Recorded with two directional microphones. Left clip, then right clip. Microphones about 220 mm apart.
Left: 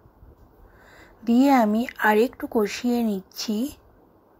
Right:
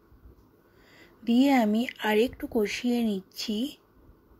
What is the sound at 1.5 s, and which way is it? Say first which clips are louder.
Speech: left 5 dB; centre (ahead or behind).